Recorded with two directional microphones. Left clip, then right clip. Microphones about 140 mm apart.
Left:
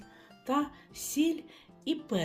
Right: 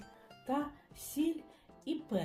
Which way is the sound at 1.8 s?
55° left (ahead or behind).